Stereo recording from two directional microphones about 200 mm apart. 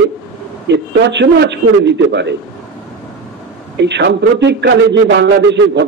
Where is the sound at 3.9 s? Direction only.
60° right (ahead or behind).